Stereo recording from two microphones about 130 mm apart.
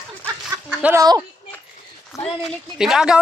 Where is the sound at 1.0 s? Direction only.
30° right (ahead or behind).